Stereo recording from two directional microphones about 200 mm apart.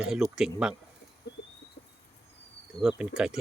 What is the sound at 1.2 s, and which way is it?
Rodents, 55° left (ahead or behind).